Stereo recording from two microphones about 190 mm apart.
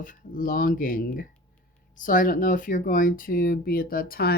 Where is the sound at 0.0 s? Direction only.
45° left (ahead or behind).